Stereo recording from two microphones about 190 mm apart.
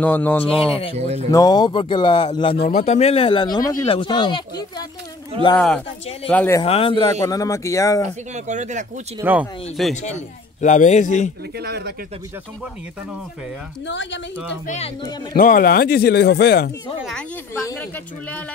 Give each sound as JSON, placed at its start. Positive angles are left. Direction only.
{"t": 0.0, "sound": "speech", "side_deg": 10}
{"t": 0.5, "sound": "speech", "side_deg": 30}
{"t": 0.9, "sound": "speech", "side_deg": -35}
{"t": 1.3, "sound": "speech", "side_deg": 20}
{"t": 5.3, "sound": "speech", "side_deg": -30}
{"t": 6.3, "sound": "speech", "side_deg": 10}
{"t": 6.6, "sound": "speech", "side_deg": 30}
{"t": 8.5, "sound": "speech", "side_deg": -40}
{"t": 9.2, "sound": "speech", "side_deg": -10}
{"t": 10.0, "sound": "a man's voice", "side_deg": 40}
{"t": 11.5, "sound": "speech", "side_deg": -55}
{"t": 13.8, "sound": "speech", "side_deg": 75}
{"t": 15.3, "sound": "speech", "side_deg": 50}